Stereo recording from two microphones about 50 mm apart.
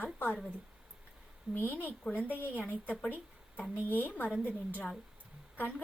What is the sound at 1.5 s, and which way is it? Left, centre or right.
Speech, left.